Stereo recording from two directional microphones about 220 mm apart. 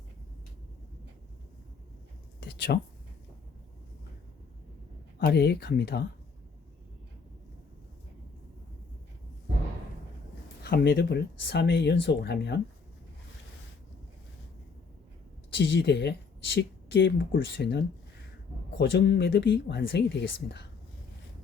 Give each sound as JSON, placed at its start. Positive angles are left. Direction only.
{"t": 2.4, "sound": "a sound", "side_deg": 50}
{"t": 5.2, "sound": "speech", "side_deg": 50}
{"t": 10.6, "sound": "speech", "side_deg": 45}
{"t": 15.5, "sound": "speech", "side_deg": 55}